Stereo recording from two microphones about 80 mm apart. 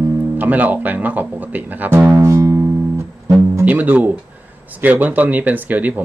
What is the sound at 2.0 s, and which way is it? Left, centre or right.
Music, right.